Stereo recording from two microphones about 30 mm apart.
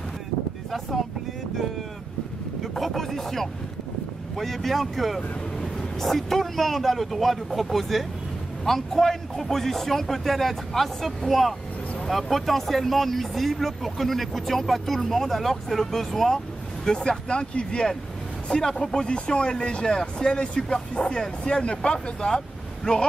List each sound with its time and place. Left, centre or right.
0.7 s speech: centre
2.6 s a man's voice: centre
16.8 s speech: left